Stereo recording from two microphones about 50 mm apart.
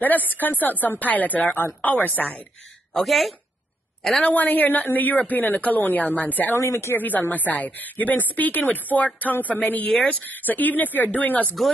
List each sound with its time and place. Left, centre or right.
0.0 s speech: left
3.1 s speech: centre
4.2 s speech: left
6.6 s speech: left
7.0 s speech: left